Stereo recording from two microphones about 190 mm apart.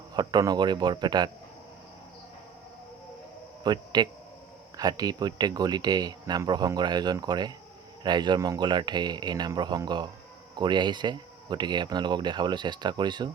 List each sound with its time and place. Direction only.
0.1 s speech: 20° right (ahead or behind)
3.6 s a man's voice: 20° right (ahead or behind)